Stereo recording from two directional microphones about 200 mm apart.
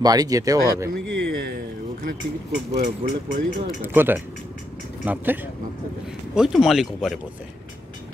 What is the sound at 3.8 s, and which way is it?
Speech, 10° right (ahead or behind).